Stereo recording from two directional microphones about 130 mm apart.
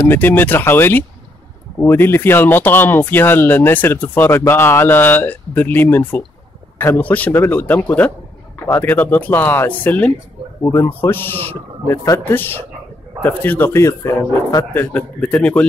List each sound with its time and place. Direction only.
0.1 s speech: 15° left (ahead or behind)